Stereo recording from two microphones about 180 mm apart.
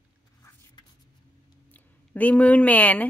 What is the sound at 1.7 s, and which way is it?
Speech, 10° left (ahead or behind).